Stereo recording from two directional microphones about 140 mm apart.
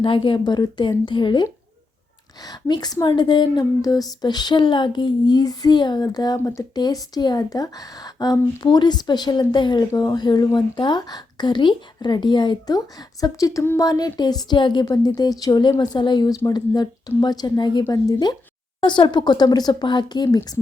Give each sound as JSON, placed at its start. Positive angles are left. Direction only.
{"t": 0.0, "sound": "a woman's voice", "side_deg": 35}